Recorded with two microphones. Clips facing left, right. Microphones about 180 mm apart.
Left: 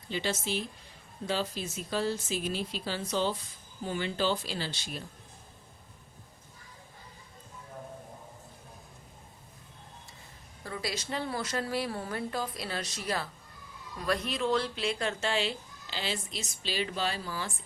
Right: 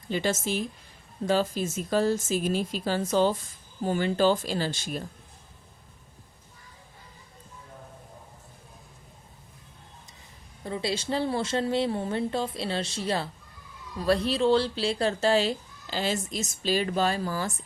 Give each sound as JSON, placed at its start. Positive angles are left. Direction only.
{"t": 0.1, "sound": "speech", "side_deg": -50}
{"t": 10.6, "sound": "a woman's voice", "side_deg": -25}